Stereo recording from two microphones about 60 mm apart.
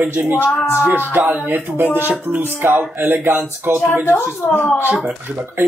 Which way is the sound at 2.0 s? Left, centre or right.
Right.